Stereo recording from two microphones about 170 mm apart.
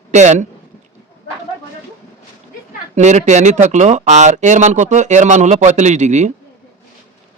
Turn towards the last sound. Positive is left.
turn(degrees=-45)  # may be behind; listen again after turning